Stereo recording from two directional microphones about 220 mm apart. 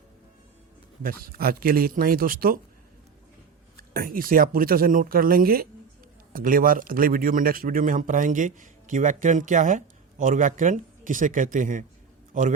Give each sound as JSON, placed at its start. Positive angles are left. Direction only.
{"t": 1.0, "sound": "a man's voice", "side_deg": -40}
{"t": 3.9, "sound": "a man's voice", "side_deg": -40}